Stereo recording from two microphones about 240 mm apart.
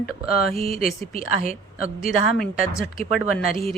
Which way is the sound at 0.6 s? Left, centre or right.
Left.